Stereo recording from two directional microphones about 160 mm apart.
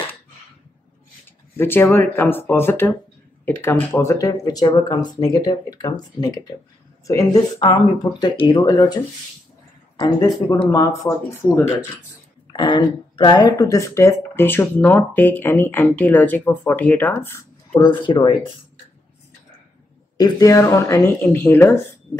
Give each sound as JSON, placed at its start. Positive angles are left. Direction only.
{"t": 1.6, "sound": "speech", "side_deg": 15}
{"t": 12.5, "sound": "speech", "side_deg": 30}
{"t": 17.7, "sound": "speech", "side_deg": 30}
{"t": 20.2, "sound": "speech", "side_deg": 25}